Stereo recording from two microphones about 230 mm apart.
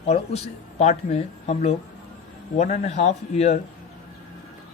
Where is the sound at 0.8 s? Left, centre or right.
Left.